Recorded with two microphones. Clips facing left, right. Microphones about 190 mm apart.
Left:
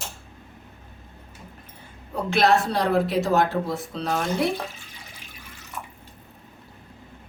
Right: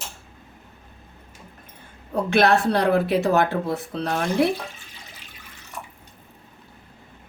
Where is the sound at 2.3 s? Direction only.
60° right (ahead or behind).